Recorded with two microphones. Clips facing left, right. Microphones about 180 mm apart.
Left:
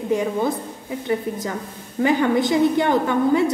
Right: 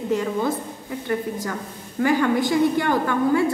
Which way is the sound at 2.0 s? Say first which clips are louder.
Left 1 dB; 20° left (ahead or behind).